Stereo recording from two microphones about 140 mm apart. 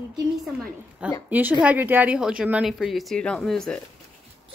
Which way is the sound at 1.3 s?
10° right (ahead or behind).